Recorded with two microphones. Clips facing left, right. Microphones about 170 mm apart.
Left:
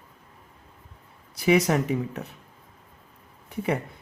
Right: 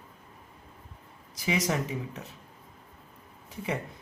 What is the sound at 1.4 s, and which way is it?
Speech, 60° left (ahead or behind).